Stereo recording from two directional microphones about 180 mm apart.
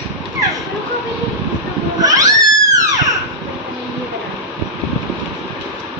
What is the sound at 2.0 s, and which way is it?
Cat, 20° right (ahead or behind).